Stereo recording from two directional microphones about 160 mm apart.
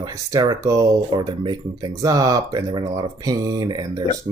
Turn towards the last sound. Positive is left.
turn(degrees=-25)  # may be behind; listen again after turning